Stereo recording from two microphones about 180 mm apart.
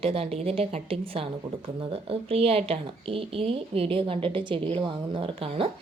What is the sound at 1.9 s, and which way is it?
A woman's voice, 35° right (ahead or behind).